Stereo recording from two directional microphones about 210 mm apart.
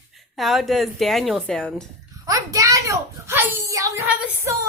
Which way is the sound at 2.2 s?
15° right (ahead or behind).